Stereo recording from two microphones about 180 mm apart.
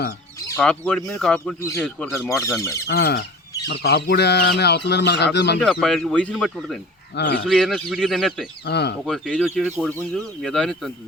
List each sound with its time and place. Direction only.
0.3 s chicken: 15° left (ahead or behind)
0.6 s speech: 5° left (ahead or behind)
2.4 s speech: 15° left (ahead or behind)
2.8 s speech: 60° left (ahead or behind)
5.5 s speech: centre (ahead or behind)
7.2 s speech: 70° left (ahead or behind)
7.4 s speech: centre (ahead or behind)
8.6 s speech: 65° left (ahead or behind)
9.0 s speech: centre (ahead or behind)